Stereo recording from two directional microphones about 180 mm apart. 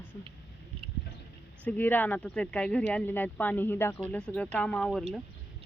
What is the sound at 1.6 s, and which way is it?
Speech, 10° left (ahead or behind).